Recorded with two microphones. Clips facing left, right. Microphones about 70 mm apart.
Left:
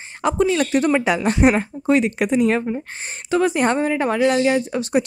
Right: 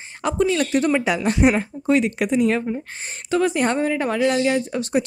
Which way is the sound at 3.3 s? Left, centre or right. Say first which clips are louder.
Left 2 dB; centre.